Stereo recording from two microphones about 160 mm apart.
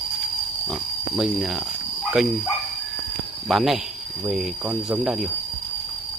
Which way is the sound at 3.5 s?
Centre (ahead or behind).